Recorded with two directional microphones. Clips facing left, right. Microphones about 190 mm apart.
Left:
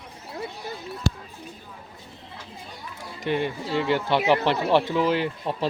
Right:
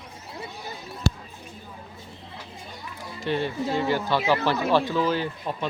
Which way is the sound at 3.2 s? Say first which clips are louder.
Even; 15° left (ahead or behind).